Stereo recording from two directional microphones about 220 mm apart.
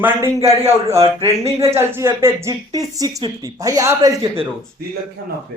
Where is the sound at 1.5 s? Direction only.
10° right (ahead or behind).